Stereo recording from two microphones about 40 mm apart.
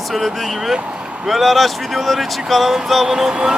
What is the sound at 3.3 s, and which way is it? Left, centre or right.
Music, right.